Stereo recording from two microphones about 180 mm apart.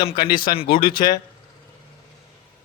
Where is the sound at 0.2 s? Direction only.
55° left (ahead or behind).